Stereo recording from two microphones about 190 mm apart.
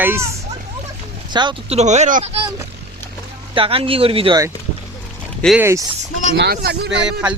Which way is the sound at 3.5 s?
30° right (ahead or behind).